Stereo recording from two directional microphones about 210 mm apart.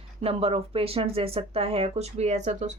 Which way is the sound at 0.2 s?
25° right (ahead or behind).